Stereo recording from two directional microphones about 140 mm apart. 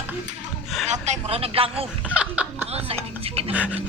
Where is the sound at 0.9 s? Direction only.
55° right (ahead or behind).